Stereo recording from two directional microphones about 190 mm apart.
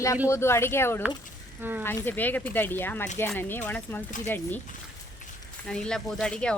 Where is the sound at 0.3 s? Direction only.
15° left (ahead or behind).